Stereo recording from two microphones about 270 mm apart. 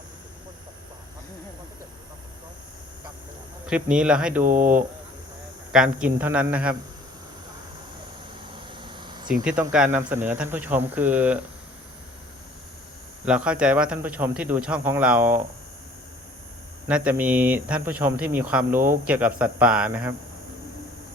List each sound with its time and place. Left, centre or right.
3.7 s a man's voice: centre
8.5 s vehicle: centre
9.4 s speech: centre
13.2 s a man's voice: centre
16.9 s a man's voice: centre